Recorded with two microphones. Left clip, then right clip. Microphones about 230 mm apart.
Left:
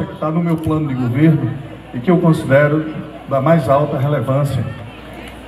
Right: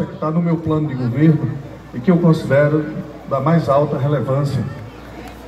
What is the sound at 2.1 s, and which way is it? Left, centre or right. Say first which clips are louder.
A man's voice: left 2 dB; left.